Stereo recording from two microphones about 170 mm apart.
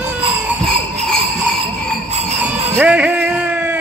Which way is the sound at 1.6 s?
35° right (ahead or behind).